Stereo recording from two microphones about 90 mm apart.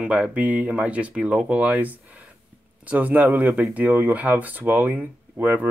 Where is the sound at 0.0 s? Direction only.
15° right (ahead or behind).